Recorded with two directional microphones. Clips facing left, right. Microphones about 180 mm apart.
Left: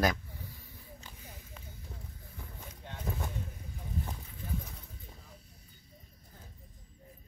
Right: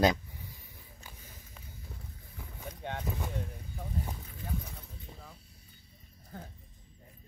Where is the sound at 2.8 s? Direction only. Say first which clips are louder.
Right 10 dB; 65° right (ahead or behind).